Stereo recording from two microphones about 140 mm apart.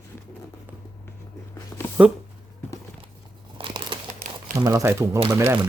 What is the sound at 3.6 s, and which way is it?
Crumpling, 35° right (ahead or behind).